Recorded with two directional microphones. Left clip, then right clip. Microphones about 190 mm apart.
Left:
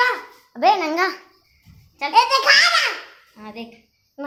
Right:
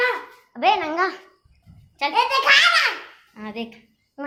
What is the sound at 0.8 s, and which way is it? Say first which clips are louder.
Speech: left 2 dB; 15° left (ahead or behind).